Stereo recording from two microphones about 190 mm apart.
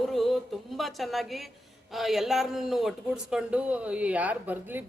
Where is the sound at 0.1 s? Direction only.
Centre (ahead or behind).